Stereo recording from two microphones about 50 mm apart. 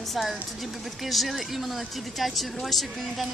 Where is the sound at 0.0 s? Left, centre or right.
Centre.